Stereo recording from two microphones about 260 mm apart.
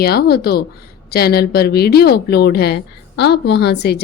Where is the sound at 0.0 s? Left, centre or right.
Left.